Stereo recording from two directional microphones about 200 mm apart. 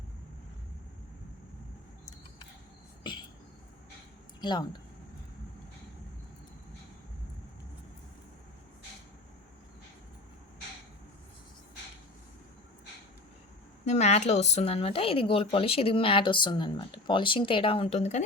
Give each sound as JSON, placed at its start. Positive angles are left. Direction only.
{"t": 4.4, "sound": "speech", "side_deg": 20}
{"t": 13.8, "sound": "speech", "side_deg": 35}